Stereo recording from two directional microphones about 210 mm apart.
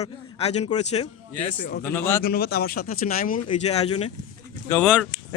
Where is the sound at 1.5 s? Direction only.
40° left (ahead or behind).